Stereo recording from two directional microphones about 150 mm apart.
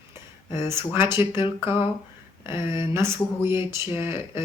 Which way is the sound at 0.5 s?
15° right (ahead or behind).